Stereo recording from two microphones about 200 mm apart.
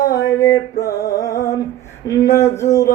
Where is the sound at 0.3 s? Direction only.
15° left (ahead or behind).